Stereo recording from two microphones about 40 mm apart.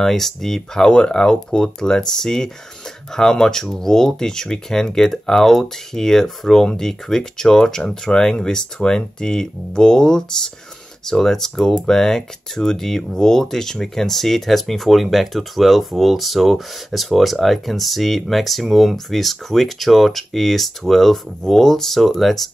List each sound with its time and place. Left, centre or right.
0.0 s speech: centre
0.9 s speech: left; by 22.5 s centre